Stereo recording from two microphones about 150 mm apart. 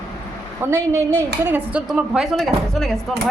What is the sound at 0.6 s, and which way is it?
Speech, 15° right (ahead or behind).